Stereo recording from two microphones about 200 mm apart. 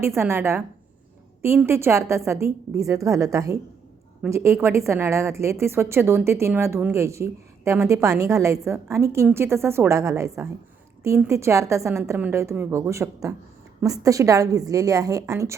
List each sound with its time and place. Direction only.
0.0 s a woman's voice: 15° right (ahead or behind)
1.6 s a woman's voice: 15° right (ahead or behind)